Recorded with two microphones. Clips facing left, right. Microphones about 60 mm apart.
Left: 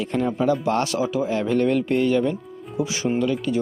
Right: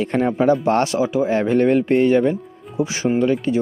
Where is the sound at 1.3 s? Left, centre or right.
Right.